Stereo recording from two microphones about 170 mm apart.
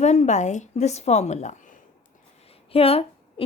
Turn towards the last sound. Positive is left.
turn(degrees=35)  # may be behind; listen again after turning